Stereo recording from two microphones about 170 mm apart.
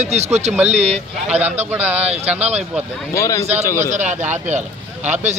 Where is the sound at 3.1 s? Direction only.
20° left (ahead or behind).